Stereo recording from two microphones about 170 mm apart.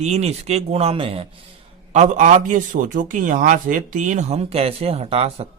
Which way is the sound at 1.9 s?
45° right (ahead or behind).